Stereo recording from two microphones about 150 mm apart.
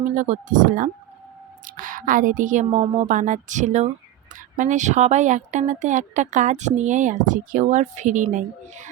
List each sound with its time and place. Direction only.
0.2 s speech: 60° right (ahead or behind)